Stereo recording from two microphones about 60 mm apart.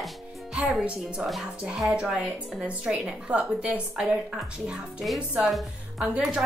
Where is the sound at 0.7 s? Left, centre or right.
Centre.